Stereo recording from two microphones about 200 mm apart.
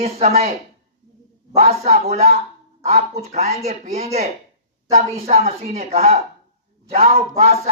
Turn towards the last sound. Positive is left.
turn(degrees=-30)  # may be behind; listen again after turning